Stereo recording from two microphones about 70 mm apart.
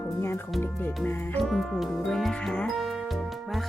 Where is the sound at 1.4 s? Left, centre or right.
Centre.